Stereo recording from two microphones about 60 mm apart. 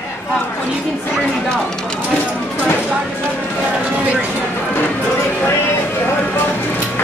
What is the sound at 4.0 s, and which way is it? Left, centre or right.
Speech, right.